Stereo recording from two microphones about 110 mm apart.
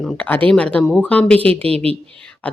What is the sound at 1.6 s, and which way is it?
Speech, 65° right (ahead or behind).